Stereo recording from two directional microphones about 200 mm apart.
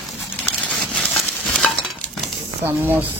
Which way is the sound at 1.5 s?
Centre (ahead or behind).